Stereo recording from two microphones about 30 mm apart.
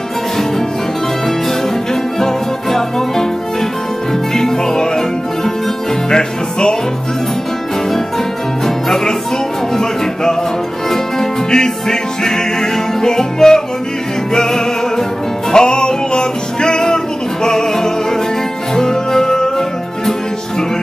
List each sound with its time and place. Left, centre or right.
2.1 s music: centre
4.3 s music: centre
8.6 s music: centre
11.5 s music: left